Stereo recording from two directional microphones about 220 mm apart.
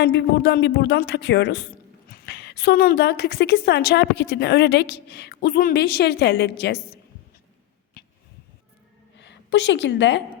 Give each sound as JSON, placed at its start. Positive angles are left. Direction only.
{"t": 0.0, "sound": "a woman's voice", "side_deg": 50}
{"t": 9.1, "sound": "a woman's voice", "side_deg": 55}